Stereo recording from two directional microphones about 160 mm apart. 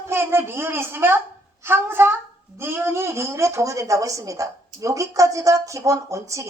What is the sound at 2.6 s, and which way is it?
A child's voice, 15° right (ahead or behind).